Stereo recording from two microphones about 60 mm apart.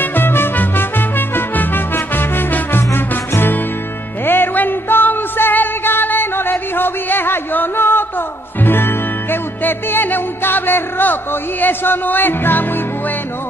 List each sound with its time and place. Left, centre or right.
0.0 s music: left
4.3 s music: left